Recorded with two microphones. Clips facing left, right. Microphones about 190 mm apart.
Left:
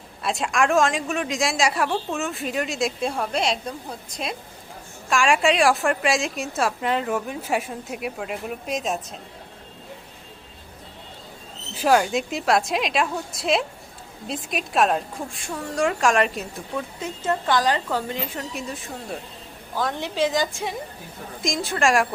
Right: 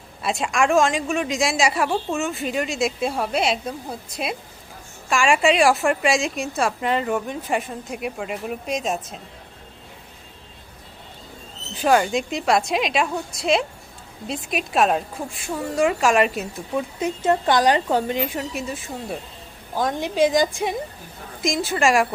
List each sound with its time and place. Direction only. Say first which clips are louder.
0.2 s a woman's voice: right 1 dB; centre (ahead or behind)
11.7 s a woman's voice: right 1 dB; 5° left (ahead or behind)
16.7 s speech: right 6 dB; 15° right (ahead or behind)
19.7 s speech: right 3 dB; 15° right (ahead or behind)
21.4 s a woman's voice: right 2 dB; centre (ahead or behind)